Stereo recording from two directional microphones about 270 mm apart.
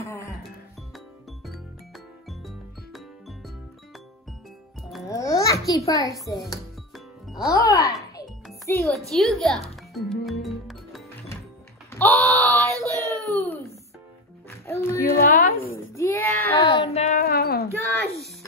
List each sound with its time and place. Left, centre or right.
0.0 s music: centre
0.9 s music: centre
5.0 s babbling: centre
5.9 s a child's voice: centre
9.7 s music: centre
11.9 s a sound: centre
12.3 s child singing: centre
13.4 s music: centre
15.0 s a sound: left
15.9 s a sound: centre
16.7 s music: left
17.9 s a sound: right